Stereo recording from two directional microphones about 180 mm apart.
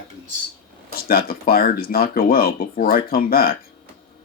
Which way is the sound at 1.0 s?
55° left (ahead or behind).